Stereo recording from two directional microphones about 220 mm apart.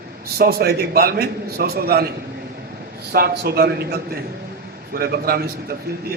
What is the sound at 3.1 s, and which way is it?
A man's voice, 45° right (ahead or behind).